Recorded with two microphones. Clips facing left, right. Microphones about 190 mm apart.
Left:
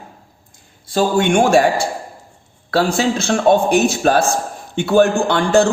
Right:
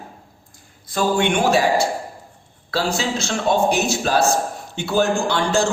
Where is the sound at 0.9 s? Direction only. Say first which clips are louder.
Left 4 dB; 40° left (ahead or behind).